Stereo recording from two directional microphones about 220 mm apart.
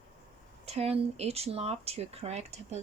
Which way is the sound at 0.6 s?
30° right (ahead or behind).